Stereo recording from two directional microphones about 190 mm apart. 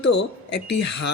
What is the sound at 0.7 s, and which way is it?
Speech, 65° left (ahead or behind).